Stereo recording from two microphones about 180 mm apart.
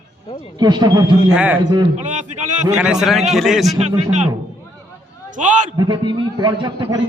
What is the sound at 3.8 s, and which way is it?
Speech, 40° right (ahead or behind).